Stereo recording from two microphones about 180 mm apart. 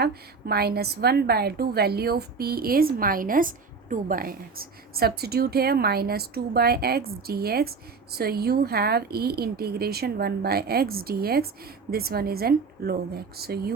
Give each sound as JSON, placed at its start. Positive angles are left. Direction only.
{"t": 0.0, "sound": "a woman's voice", "side_deg": -60}